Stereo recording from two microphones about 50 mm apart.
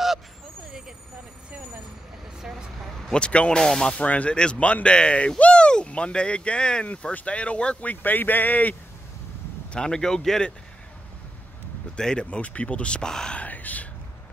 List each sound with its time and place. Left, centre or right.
3.1 s speech: left
3.5 s speech: centre
3.9 s speech: left
9.7 s speech: centre
12.0 s speech: centre
12.3 s speech: left
13.4 s speech: left